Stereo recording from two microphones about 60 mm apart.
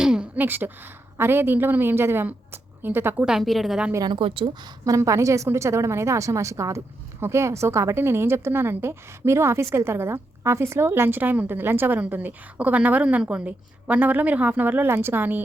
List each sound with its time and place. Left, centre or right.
0.0 s a sound: centre
0.3 s a woman's voice: right
3.4 s a woman's voice: centre
4.9 s a woman's voice: right